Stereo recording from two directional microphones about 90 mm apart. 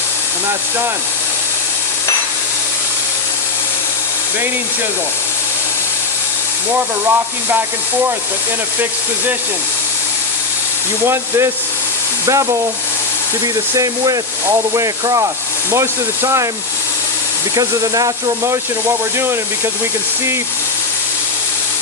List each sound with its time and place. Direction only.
6.7 s speech: 20° right (ahead or behind)
11.0 s speech: 30° right (ahead or behind)
13.7 s speech: 40° right (ahead or behind)
17.5 s speech: 40° right (ahead or behind)
18.4 s speech: 30° right (ahead or behind)